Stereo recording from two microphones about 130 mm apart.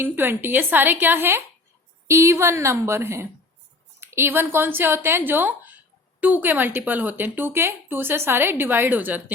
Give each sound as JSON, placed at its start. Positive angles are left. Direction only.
{"t": 0.0, "sound": "a woman's voice", "side_deg": -15}